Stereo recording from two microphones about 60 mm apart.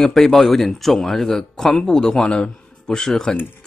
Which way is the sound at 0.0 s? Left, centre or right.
Centre.